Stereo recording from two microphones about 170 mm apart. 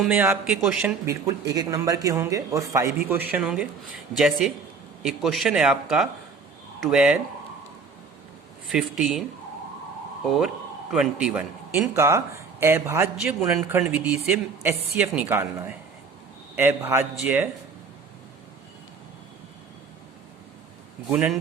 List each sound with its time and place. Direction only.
0.1 s speech: 10° right (ahead or behind)
1.0 s speech: 20° right (ahead or behind)
3.3 s speech: 5° right (ahead or behind)
8.6 s speech: centre (ahead or behind)
10.2 s speech: 5° right (ahead or behind)
11.9 s speech: 15° right (ahead or behind)
13.1 s speech: 5° right (ahead or behind)
21.1 s speech: 10° right (ahead or behind)